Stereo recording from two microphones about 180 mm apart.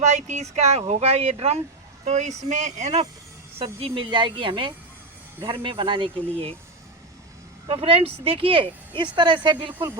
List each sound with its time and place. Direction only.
0.0 s speech: 40° right (ahead or behind)
7.7 s speech: 30° right (ahead or behind)